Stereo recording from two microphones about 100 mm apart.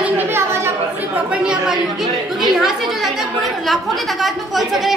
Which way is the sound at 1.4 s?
5° right (ahead or behind).